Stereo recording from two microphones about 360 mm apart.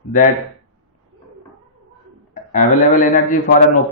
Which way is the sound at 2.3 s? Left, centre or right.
Centre.